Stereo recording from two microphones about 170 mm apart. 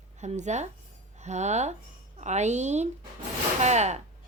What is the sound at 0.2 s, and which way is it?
A woman's voice, 45° right (ahead or behind).